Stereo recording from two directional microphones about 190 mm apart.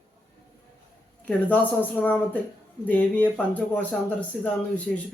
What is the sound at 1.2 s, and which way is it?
A man's voice, 10° left (ahead or behind).